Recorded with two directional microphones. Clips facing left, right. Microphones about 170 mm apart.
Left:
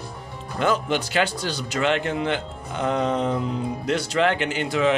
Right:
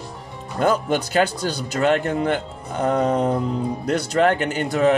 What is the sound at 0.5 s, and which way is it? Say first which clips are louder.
Speech: right 3 dB; 45° right (ahead or behind).